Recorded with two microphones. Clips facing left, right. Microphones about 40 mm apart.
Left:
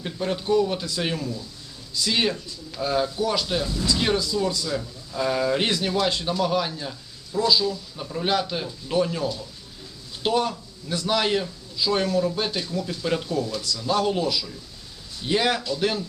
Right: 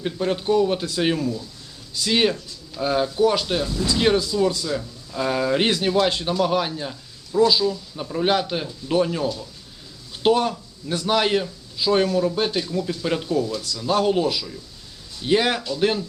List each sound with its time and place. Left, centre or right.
0.0 s a man's voice: centre
3.2 s a man's voice: right
3.4 s speech: centre
5.6 s a man's voice: right
8.2 s a man's voice: right; by 13.6 s centre
13.8 s speech: centre